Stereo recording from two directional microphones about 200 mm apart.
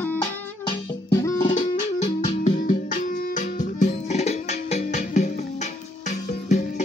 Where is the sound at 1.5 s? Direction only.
40° left (ahead or behind).